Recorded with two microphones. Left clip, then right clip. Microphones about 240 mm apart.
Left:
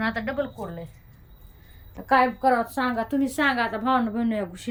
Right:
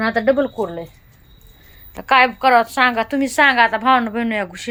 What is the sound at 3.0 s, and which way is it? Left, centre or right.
A woman's voice, centre.